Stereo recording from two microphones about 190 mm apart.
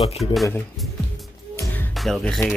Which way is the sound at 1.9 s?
Centre (ahead or behind).